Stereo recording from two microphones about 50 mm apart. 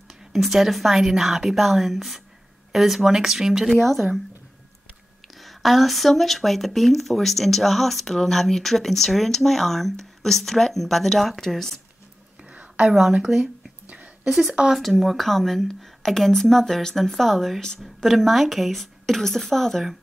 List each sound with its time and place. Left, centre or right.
0.1 s speech: centre
5.4 s speech: centre
12.4 s whispering: right
12.8 s speech: centre
13.4 s a sound: right
14.2 s speech: centre
14.8 s speech: centre